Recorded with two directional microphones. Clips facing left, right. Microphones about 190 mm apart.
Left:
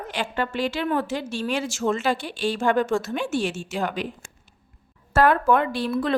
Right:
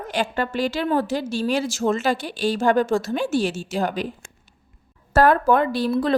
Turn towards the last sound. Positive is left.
turn(degrees=-35)  # may be behind; listen again after turning